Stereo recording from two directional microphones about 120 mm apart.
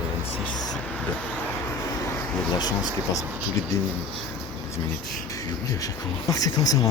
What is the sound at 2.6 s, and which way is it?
Speech, 35° left (ahead or behind).